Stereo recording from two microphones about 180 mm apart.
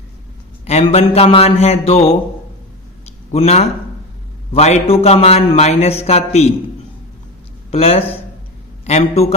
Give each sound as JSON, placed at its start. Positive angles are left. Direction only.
{"t": 0.6, "sound": "a man's voice", "side_deg": 35}
{"t": 3.3, "sound": "a man's voice", "side_deg": 35}
{"t": 7.7, "sound": "a man's voice", "side_deg": 35}